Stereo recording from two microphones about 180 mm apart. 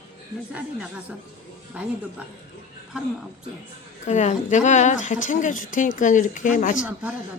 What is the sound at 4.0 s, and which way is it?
Speech, 40° left (ahead or behind).